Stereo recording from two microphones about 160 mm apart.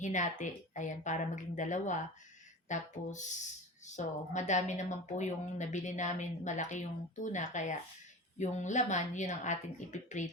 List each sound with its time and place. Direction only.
0.0 s a woman's voice: 50° left (ahead or behind)